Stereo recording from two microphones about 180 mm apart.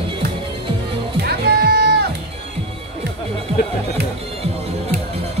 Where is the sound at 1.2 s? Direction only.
60° right (ahead or behind).